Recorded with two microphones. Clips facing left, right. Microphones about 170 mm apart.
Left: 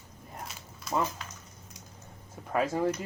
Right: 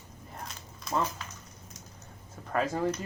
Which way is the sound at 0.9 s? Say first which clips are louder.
Even; centre (ahead or behind).